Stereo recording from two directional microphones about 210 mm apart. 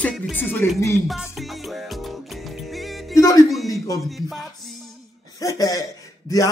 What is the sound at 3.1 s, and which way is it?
Speech, 15° left (ahead or behind).